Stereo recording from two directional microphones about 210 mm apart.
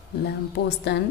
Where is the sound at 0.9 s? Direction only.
50° left (ahead or behind).